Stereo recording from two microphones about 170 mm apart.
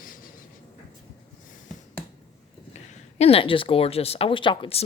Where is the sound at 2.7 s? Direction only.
40° left (ahead or behind).